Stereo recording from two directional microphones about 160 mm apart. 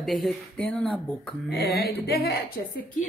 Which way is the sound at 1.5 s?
80° left.